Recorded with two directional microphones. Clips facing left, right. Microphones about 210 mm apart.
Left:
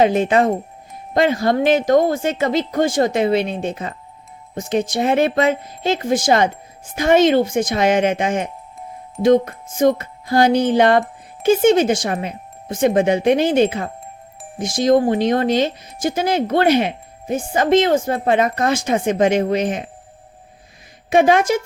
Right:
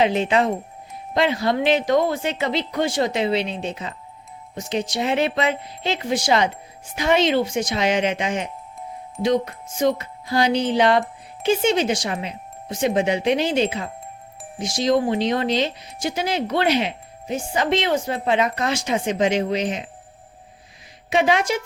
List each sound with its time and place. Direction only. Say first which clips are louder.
0.0 s speech: left 4 dB; 50° left (ahead or behind)
21.1 s speech: left 5 dB; 50° left (ahead or behind)